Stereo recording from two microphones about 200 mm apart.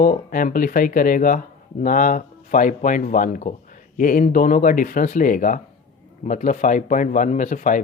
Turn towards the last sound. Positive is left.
turn(degrees=40)  # may be behind; listen again after turning